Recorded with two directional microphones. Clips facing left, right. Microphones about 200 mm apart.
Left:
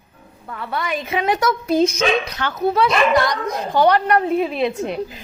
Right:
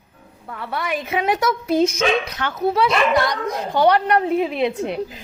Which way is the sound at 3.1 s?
25° right (ahead or behind).